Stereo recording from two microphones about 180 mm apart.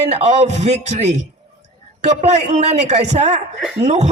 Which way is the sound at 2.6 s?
40° right (ahead or behind).